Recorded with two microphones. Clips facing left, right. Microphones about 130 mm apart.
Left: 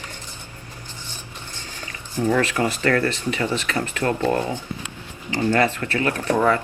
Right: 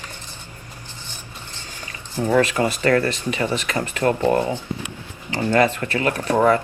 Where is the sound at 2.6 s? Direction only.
30° right (ahead or behind).